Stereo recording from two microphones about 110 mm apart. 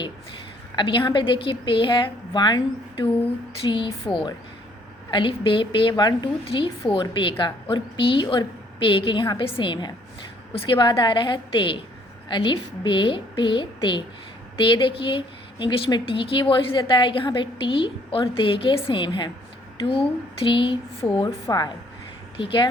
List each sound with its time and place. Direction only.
0.8 s a woman's voice: 45° left (ahead or behind)
6.4 s a woman's voice: 50° left (ahead or behind)
21.4 s a woman's voice: 40° left (ahead or behind)
22.4 s a woman's voice: 50° left (ahead or behind)